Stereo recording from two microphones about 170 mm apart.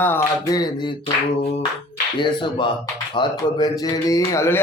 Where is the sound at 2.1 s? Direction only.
30° left (ahead or behind).